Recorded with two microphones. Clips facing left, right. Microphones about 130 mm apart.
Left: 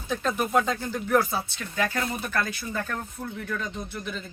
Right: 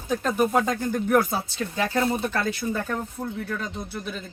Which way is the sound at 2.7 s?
10° right (ahead or behind).